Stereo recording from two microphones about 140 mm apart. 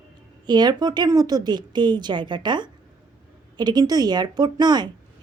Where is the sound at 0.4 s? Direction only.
30° right (ahead or behind).